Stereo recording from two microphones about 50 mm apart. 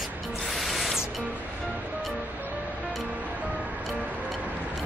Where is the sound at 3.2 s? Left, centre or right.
Right.